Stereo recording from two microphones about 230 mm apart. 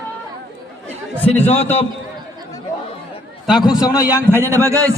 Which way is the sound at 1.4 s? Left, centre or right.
Left.